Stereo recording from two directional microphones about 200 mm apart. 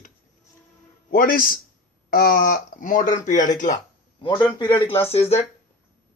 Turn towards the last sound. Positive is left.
turn(degrees=30)  # may be behind; listen again after turning